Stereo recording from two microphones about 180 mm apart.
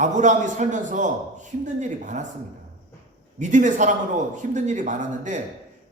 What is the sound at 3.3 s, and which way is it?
A man's voice, 45° right (ahead or behind).